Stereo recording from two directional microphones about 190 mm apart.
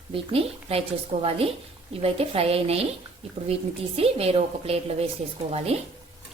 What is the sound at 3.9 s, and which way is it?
A woman's voice, 30° right (ahead or behind).